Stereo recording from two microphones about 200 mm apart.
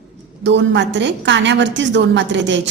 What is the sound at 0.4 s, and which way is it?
A woman's voice, 65° right (ahead or behind).